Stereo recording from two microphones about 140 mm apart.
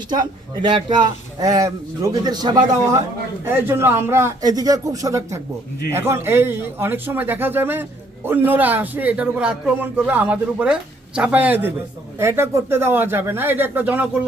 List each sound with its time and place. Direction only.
0.1 s a man's voice: 30° right (ahead or behind)
3.4 s a man's voice: 15° right (ahead or behind)